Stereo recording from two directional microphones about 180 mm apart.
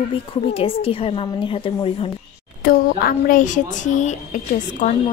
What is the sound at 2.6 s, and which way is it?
Speech, 55° left (ahead or behind).